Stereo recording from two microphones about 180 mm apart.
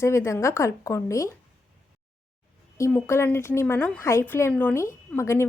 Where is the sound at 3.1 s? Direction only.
15° left (ahead or behind).